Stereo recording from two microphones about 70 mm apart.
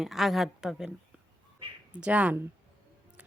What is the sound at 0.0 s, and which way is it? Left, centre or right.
Speech, centre.